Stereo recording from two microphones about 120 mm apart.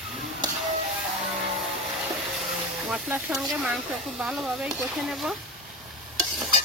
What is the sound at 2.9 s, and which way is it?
Speech, 5° right (ahead or behind).